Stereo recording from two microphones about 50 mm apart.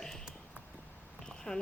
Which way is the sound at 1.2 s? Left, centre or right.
Centre.